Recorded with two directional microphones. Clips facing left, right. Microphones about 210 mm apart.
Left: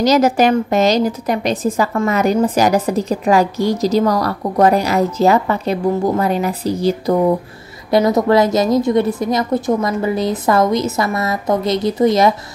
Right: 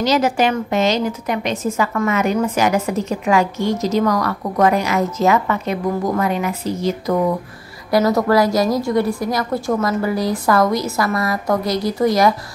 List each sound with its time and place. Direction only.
0.0 s a woman's voice: 40° left (ahead or behind)
7.9 s a woman's voice: 20° left (ahead or behind)